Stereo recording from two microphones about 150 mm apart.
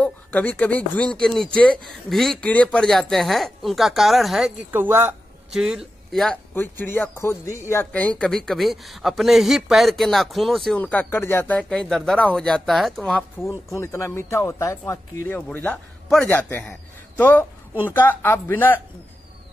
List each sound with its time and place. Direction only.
0.0 s speech: 10° left (ahead or behind)
4.6 s speech: 15° right (ahead or behind)
5.5 s speech: 5° right (ahead or behind)
6.5 s speech: 15° left (ahead or behind)
13.7 s speech: 20° left (ahead or behind)